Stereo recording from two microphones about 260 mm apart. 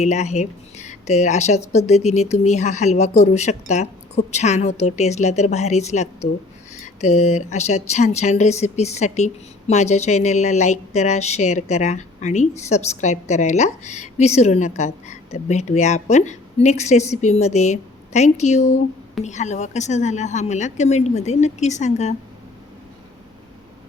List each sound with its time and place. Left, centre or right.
0.0 s speech: left